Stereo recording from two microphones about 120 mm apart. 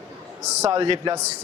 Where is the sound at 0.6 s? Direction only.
35° right (ahead or behind).